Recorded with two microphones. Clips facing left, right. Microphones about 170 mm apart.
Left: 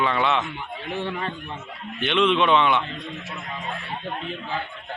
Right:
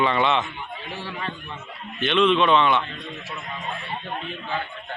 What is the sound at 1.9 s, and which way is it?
Speech, 15° left (ahead or behind).